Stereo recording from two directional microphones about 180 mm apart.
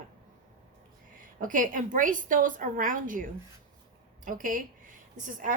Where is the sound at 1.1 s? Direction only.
45° right (ahead or behind).